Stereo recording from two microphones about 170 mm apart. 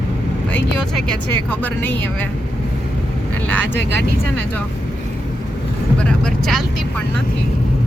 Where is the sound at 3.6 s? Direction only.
90° right.